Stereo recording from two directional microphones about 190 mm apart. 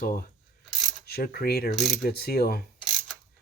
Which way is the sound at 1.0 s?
55° left (ahead or behind).